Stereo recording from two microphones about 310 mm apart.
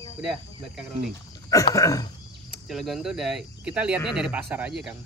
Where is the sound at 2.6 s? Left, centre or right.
Centre.